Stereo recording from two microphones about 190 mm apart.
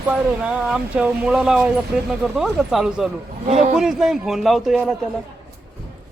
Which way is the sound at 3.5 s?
35° right (ahead or behind).